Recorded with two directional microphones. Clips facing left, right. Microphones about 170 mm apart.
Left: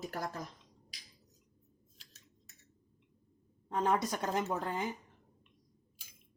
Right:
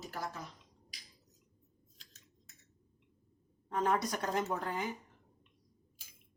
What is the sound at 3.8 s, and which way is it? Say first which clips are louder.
Speech: left 1 dB; 15° left (ahead or behind).